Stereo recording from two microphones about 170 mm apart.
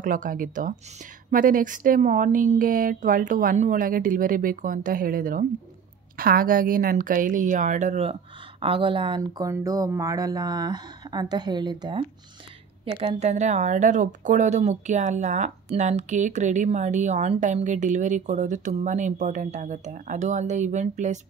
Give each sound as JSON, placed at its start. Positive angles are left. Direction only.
{"t": 0.0, "sound": "a woman's voice", "side_deg": -50}
{"t": 12.8, "sound": "speech", "side_deg": -35}